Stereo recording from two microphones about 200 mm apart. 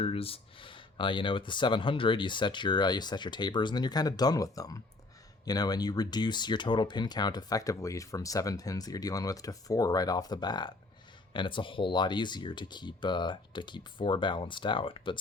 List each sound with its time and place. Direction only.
0.0 s speech: 30° left (ahead or behind)